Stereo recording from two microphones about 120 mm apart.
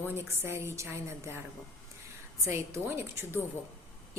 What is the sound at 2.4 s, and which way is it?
Speech, 25° right (ahead or behind).